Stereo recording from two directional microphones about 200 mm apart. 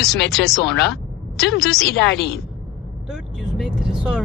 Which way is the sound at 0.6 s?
60° left (ahead or behind).